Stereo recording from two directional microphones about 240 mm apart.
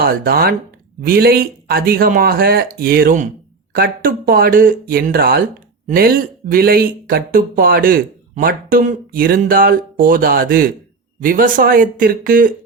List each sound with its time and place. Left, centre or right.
0.0 s speech: right